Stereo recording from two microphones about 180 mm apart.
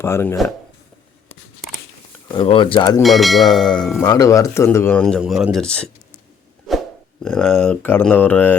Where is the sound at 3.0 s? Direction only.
Centre (ahead or behind).